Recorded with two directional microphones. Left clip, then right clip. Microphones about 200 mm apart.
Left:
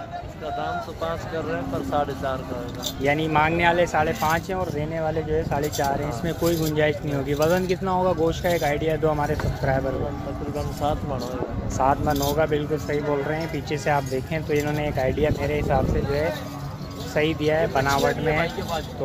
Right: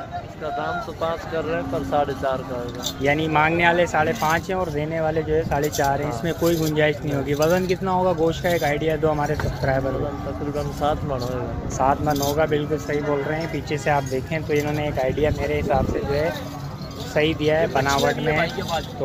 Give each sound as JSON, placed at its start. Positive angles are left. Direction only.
{"t": 1.9, "sound": "speech", "side_deg": -30}
{"t": 3.0, "sound": "speech", "side_deg": 0}
{"t": 11.8, "sound": "speech", "side_deg": 0}